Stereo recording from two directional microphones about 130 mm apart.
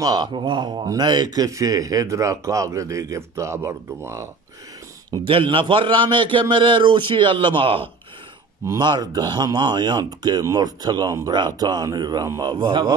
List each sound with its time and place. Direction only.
0.0 s speech: 30° right (ahead or behind)
5.1 s speech: 40° right (ahead or behind)
8.6 s speech: 35° right (ahead or behind)